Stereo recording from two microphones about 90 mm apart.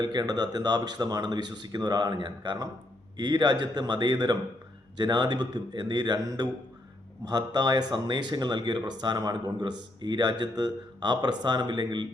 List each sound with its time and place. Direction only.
0.0 s speech: 50° right (ahead or behind)